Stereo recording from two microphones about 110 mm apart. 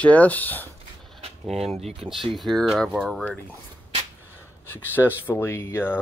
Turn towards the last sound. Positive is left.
turn(degrees=20)  # may be behind; listen again after turning